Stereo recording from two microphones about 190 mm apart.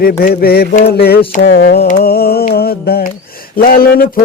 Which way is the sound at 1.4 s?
50° left (ahead or behind).